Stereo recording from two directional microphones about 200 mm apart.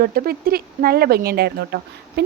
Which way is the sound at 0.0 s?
45° right (ahead or behind).